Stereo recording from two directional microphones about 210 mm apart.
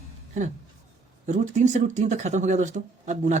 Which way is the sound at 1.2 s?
35° right (ahead or behind).